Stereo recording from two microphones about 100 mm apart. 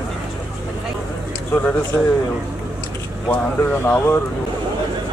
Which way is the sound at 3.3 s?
15° left (ahead or behind).